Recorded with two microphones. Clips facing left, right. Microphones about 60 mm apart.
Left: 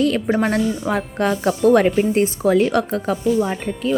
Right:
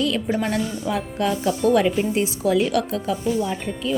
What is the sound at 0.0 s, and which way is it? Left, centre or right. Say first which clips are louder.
Speech: left 4 dB; left.